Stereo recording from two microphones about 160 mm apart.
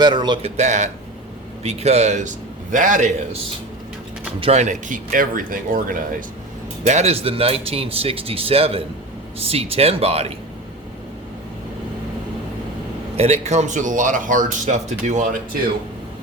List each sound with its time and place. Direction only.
0.0 s speech: 30° right (ahead or behind)
0.5 s speech: 45° right (ahead or behind)
4.4 s speech: 40° right (ahead or behind); by 6.2 s 60° right (ahead or behind)
6.8 s speech: 40° right (ahead or behind)
13.1 s speech: 40° right (ahead or behind)